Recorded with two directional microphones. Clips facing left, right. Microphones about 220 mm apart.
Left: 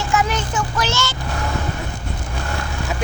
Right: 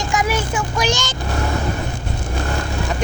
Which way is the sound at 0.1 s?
10° right (ahead or behind).